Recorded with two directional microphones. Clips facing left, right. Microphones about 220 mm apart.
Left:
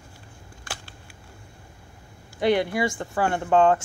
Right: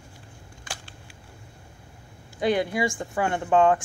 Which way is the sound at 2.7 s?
20° right (ahead or behind).